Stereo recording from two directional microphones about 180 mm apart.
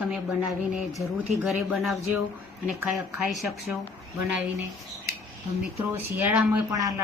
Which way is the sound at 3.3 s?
Centre (ahead or behind).